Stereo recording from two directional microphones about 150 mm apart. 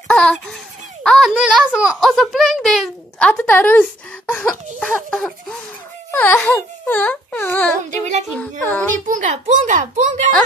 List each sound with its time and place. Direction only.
0.1 s a sound: 5° left (ahead or behind)
1.0 s a child's voice: centre (ahead or behind)
9.0 s a child's voice: 55° right (ahead or behind)